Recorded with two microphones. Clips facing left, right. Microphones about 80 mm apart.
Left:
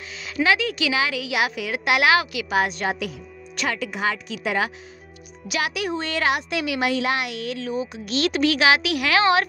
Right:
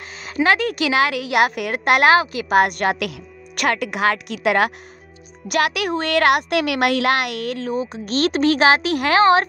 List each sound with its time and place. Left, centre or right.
0.2 s speech: right
2.5 s speech: right